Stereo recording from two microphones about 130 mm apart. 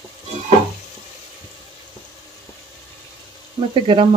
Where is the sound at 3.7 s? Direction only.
40° right (ahead or behind).